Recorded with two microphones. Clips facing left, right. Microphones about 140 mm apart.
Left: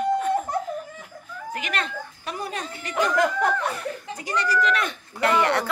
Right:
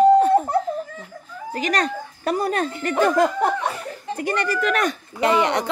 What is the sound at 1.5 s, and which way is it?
Speech, 40° right (ahead or behind).